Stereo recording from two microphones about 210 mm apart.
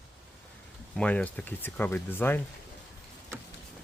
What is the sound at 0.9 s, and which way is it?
Speech, 5° left (ahead or behind).